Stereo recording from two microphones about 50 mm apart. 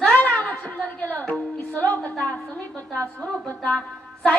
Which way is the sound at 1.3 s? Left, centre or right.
Left.